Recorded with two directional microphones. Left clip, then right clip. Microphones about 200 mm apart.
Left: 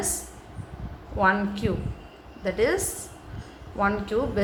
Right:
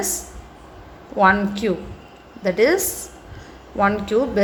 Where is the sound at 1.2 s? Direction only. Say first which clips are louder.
Right 7 dB; 25° right (ahead or behind).